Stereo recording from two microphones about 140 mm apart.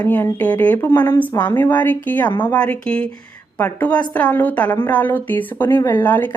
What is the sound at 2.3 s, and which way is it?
Speech, 35° left (ahead or behind).